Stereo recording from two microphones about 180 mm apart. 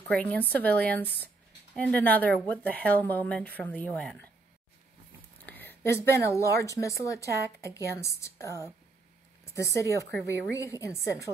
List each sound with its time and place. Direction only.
0.1 s speech: 5° left (ahead or behind)
5.4 s speech: 10° left (ahead or behind)
9.6 s speech: 15° left (ahead or behind)